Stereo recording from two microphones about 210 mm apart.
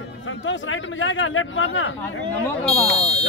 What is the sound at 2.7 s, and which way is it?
Buzzer, 5° left (ahead or behind).